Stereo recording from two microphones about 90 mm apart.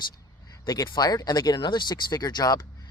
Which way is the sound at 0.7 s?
45° left (ahead or behind).